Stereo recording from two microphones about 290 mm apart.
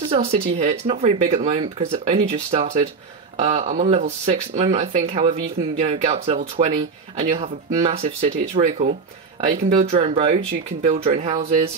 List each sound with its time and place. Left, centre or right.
0.1 s speech: right